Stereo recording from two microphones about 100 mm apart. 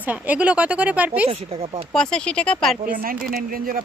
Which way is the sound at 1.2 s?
70° right (ahead or behind).